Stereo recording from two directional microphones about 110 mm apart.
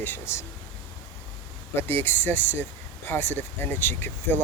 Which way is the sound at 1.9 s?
20° left (ahead or behind).